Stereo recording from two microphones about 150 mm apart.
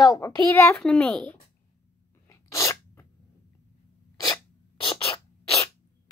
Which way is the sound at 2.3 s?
20° left (ahead or behind).